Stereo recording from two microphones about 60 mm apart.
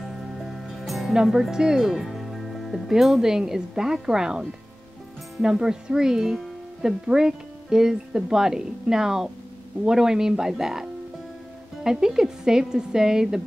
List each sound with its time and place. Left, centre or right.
0.0 s music: centre
1.1 s speech: centre